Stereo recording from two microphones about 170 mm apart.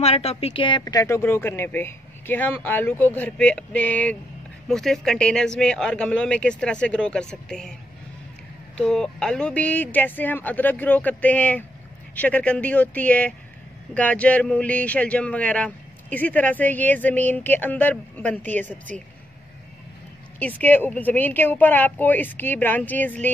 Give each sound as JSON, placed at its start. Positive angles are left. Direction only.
{"t": 0.0, "sound": "speech", "side_deg": 35}
{"t": 8.7, "sound": "speech", "side_deg": 5}
{"t": 20.3, "sound": "speech", "side_deg": 10}